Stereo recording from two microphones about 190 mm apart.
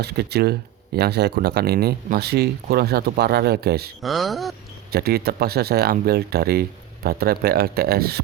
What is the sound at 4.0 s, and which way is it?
Speech, centre (ahead or behind).